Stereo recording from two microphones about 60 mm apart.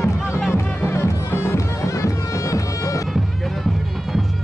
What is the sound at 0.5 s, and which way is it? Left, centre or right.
Music, left.